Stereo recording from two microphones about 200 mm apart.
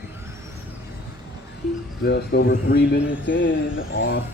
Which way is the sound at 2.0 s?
55° left (ahead or behind).